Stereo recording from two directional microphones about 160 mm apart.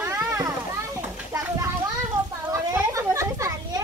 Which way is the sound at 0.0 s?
15° right (ahead or behind).